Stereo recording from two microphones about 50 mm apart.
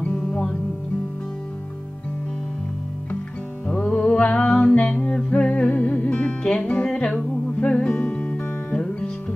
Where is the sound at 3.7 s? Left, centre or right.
Left.